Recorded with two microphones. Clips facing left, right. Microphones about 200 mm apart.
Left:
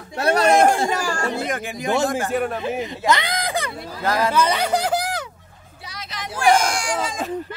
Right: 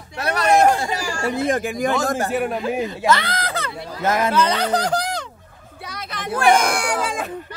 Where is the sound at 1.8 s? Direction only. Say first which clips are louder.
Right 1 dB; 45° right (ahead or behind).